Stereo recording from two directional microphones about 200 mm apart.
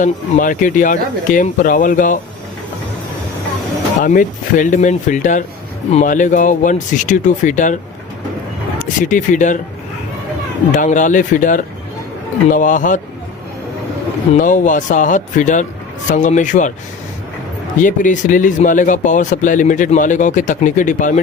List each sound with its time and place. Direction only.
0.0 s speech: 40° left (ahead or behind)
4.0 s speech: 40° left (ahead or behind)
8.8 s speech: 40° left (ahead or behind)
10.8 s speech: 40° left (ahead or behind)
14.3 s speech: 40° left (ahead or behind)
17.7 s speech: 40° left (ahead or behind)